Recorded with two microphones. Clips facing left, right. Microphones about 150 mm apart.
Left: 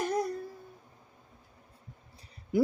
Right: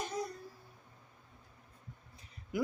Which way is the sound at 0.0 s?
60° left (ahead or behind).